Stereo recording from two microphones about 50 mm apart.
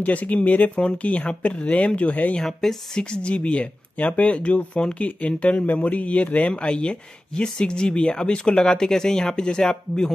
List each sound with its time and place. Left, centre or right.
0.0 s speech: left
2.4 s speech: centre; by 6.5 s left
6.5 s speech: left